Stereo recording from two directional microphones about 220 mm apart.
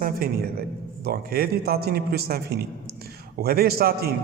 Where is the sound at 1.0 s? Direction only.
45° right (ahead or behind).